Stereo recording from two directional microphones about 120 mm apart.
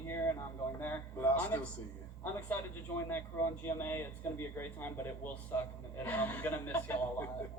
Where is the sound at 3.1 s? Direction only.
20° left (ahead or behind).